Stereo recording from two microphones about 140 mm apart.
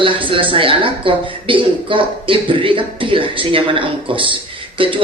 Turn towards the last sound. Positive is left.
turn(degrees=-40)  # may be behind; listen again after turning